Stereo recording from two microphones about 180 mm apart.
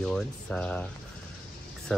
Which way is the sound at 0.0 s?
5° left (ahead or behind).